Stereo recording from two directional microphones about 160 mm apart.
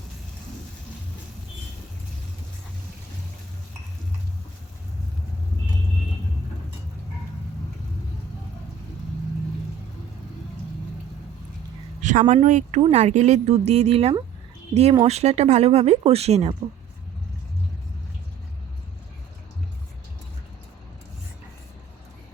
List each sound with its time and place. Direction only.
12.3 s speech: 50° right (ahead or behind)